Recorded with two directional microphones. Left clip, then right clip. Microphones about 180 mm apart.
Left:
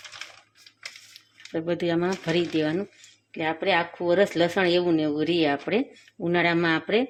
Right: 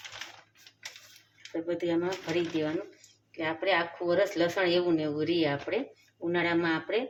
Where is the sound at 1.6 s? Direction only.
60° left (ahead or behind).